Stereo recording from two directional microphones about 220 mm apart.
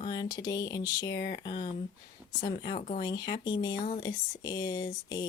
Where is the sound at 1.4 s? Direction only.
20° left (ahead or behind).